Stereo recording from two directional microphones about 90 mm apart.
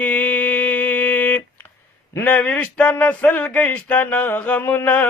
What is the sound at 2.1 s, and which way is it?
Speech, 20° left (ahead or behind).